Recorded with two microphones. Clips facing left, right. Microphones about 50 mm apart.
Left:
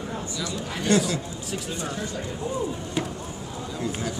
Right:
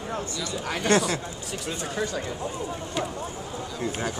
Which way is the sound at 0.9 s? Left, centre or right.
Right.